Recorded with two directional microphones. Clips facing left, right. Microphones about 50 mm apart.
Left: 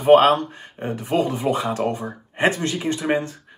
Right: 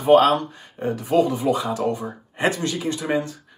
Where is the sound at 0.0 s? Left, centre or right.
Left.